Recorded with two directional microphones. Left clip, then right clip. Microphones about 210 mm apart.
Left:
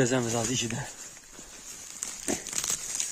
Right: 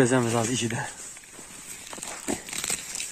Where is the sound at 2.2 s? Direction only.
35° left (ahead or behind).